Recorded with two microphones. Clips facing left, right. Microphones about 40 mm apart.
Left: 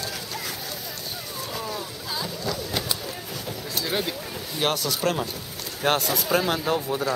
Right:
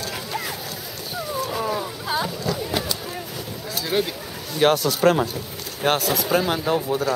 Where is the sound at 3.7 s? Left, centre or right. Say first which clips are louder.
Right 4 dB; centre.